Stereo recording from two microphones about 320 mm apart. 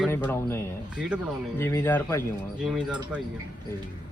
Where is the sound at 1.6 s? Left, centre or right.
Centre.